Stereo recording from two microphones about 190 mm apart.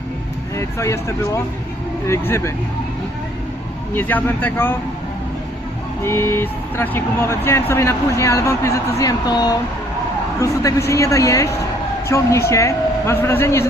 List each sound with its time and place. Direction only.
0.5 s speech: 15° left (ahead or behind)
3.9 s speech: 10° left (ahead or behind)
6.1 s speech: 10° left (ahead or behind)